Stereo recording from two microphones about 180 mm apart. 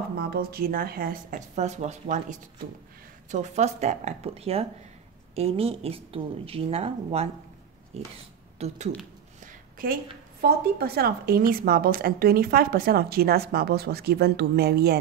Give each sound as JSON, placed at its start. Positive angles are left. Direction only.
{"t": 0.2, "sound": "speech", "side_deg": -55}
{"t": 9.4, "sound": "a sound", "side_deg": -50}
{"t": 10.4, "sound": "a woman's voice", "side_deg": -60}